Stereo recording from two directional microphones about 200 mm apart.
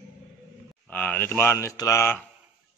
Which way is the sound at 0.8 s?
5° left (ahead or behind).